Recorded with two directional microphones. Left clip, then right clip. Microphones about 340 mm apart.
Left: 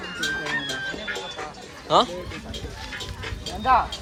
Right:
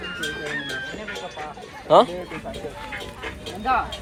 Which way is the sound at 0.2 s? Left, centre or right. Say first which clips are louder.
Left 4 dB; left.